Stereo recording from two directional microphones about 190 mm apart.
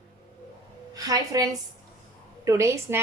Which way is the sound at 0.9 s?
20° right (ahead or behind).